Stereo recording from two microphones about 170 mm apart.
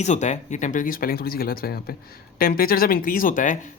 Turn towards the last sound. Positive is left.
turn(degrees=50)  # may be behind; listen again after turning